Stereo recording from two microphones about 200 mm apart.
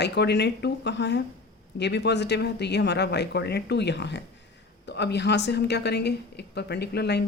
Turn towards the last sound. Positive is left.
turn(degrees=55)  # may be behind; listen again after turning